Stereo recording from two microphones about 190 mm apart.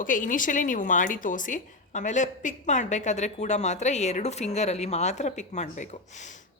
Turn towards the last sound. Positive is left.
turn(degrees=40)  # may be behind; listen again after turning